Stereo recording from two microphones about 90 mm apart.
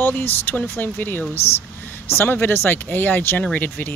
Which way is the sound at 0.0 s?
20° left (ahead or behind).